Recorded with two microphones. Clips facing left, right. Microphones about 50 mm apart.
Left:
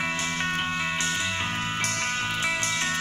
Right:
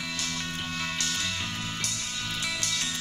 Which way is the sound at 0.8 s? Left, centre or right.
Left.